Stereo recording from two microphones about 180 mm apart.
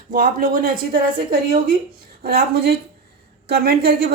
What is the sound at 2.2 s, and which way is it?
Speech, 60° right (ahead or behind).